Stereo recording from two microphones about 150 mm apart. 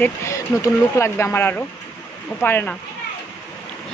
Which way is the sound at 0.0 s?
20° left (ahead or behind).